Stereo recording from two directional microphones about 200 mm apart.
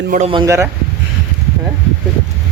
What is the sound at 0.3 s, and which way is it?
Speech, 20° right (ahead or behind).